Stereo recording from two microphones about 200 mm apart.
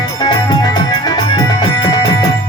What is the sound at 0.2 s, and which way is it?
Music, 20° left (ahead or behind).